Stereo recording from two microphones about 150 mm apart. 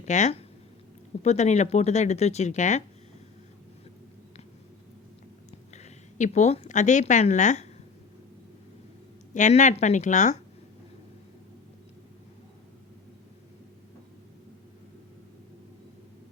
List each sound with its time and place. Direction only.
0.0 s speech: 50° left (ahead or behind)
5.5 s a woman's voice: 50° left (ahead or behind)
9.3 s speech: 50° left (ahead or behind)